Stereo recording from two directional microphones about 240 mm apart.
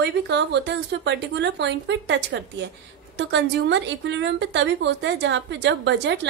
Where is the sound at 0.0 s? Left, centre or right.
Right.